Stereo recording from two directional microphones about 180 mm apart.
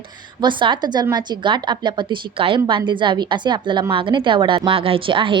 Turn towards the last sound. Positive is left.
turn(degrees=-30)  # may be behind; listen again after turning